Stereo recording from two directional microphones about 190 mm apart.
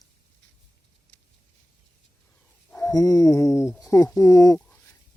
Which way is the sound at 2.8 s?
15° left (ahead or behind).